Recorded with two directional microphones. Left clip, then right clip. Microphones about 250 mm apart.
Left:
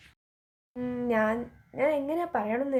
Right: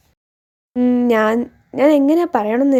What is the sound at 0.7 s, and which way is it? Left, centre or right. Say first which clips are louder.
Speech: right 14 dB; right.